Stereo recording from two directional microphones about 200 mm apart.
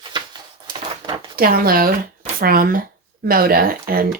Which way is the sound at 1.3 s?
45° right (ahead or behind).